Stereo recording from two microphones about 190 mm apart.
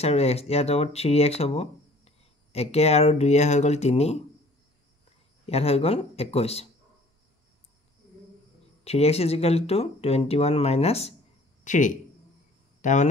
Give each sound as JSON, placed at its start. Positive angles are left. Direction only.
{"t": 0.0, "sound": "speech", "side_deg": 35}
{"t": 5.5, "sound": "speech", "side_deg": 30}
{"t": 8.8, "sound": "speech", "side_deg": 35}